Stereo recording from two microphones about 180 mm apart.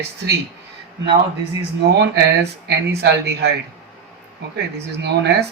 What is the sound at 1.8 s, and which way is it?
Speech, 65° right (ahead or behind).